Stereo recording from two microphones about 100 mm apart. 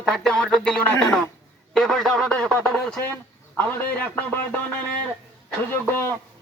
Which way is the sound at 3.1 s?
15° left (ahead or behind).